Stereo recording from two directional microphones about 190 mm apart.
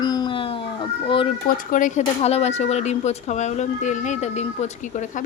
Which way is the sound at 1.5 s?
45° left (ahead or behind).